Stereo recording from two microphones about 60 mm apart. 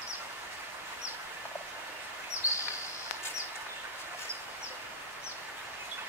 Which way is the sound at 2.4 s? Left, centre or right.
Left.